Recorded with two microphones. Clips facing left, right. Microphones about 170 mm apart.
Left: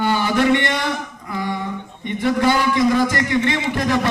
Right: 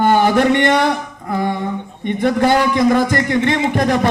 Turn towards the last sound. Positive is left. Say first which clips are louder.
# right 4 dB
turn(degrees=-55)  # may be behind; listen again after turning